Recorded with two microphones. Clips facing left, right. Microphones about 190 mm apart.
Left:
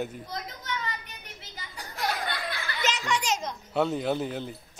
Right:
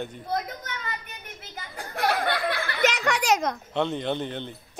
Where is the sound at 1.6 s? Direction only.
55° right (ahead or behind).